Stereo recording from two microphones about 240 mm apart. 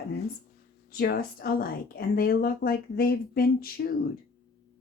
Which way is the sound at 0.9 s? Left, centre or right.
Left.